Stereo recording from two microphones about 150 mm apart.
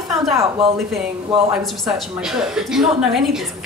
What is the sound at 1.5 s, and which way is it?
A woman's voice, centre (ahead or behind).